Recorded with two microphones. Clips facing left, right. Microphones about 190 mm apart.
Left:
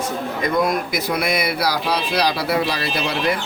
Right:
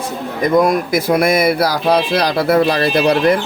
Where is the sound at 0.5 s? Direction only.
50° right (ahead or behind).